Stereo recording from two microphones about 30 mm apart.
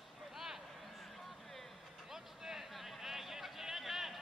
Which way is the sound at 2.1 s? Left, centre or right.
Centre.